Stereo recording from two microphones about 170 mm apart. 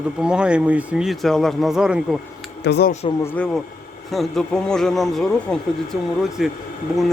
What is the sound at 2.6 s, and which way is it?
Speech, 75° left (ahead or behind).